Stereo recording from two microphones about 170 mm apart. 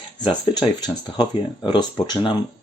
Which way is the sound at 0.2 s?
25° left (ahead or behind).